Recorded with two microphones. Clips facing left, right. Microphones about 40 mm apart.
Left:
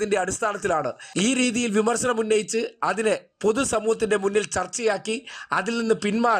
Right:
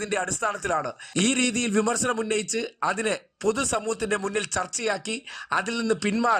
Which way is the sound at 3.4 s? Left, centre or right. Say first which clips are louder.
Left 3 dB; left.